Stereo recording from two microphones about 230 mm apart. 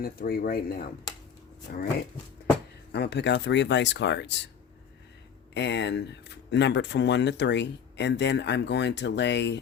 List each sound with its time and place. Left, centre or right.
0.0 s speech: left
2.9 s speech: left
5.5 s speech: left